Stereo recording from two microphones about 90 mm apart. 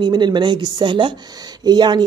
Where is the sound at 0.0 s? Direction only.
55° right (ahead or behind).